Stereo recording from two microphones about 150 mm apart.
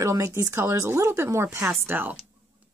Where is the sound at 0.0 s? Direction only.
20° right (ahead or behind).